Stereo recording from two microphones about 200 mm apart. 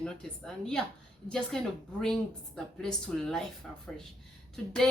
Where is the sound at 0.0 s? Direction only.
5° left (ahead or behind).